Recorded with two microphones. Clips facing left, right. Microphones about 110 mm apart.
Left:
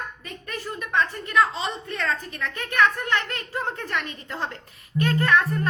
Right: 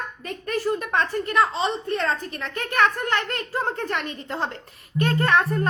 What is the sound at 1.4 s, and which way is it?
A woman's voice, 35° right (ahead or behind).